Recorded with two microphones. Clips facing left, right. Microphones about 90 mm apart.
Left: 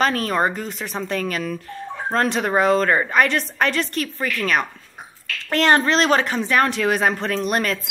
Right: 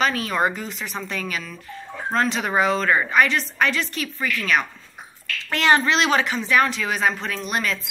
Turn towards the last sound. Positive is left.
turn(degrees=50)  # may be behind; listen again after turning